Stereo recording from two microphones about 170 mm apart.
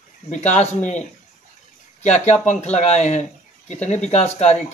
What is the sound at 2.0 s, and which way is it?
Speech, 40° left (ahead or behind).